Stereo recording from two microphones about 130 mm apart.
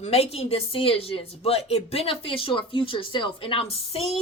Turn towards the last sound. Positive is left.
turn(degrees=50)  # may be behind; listen again after turning